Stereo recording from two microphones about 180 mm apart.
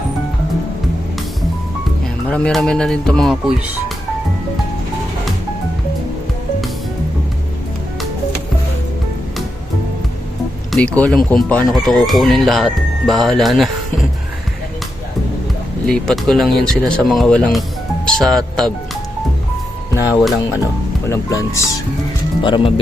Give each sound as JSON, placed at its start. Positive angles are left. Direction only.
{"t": 2.3, "sound": "speech", "side_deg": 5}
{"t": 10.7, "sound": "speech", "side_deg": 5}
{"t": 15.9, "sound": "speech", "side_deg": 5}
{"t": 19.9, "sound": "music", "side_deg": 15}
{"t": 21.1, "sound": "speech", "side_deg": 20}